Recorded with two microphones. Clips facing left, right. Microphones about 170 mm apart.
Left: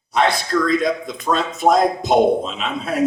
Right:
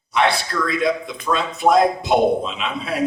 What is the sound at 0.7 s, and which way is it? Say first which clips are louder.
A man's voice: left 2 dB; 45° left (ahead or behind).